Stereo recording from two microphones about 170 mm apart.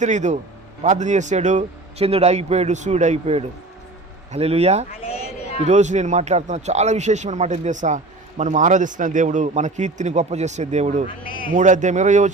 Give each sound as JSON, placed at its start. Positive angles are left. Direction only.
{"t": 0.0, "sound": "a man's voice", "side_deg": -45}
{"t": 5.0, "sound": "a sound", "side_deg": 35}
{"t": 5.6, "sound": "a man's voice", "side_deg": -45}